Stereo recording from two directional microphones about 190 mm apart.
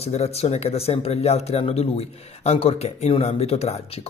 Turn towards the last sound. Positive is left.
turn(degrees=30)  # may be behind; listen again after turning